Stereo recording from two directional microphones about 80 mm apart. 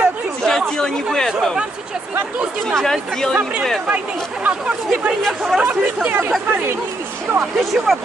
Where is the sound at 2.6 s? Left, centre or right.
Centre.